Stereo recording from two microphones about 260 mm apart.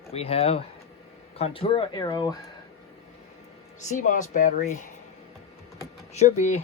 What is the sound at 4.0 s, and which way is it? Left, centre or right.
Speech, left.